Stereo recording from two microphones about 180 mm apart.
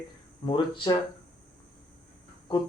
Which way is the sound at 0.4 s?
25° left (ahead or behind).